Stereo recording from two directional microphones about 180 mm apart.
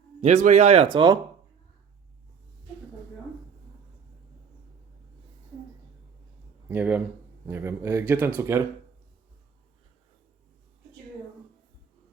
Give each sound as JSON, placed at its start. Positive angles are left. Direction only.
{"t": 0.2, "sound": "speech", "side_deg": -40}
{"t": 0.9, "sound": "speech", "side_deg": -25}
{"t": 6.7, "sound": "speech", "side_deg": -10}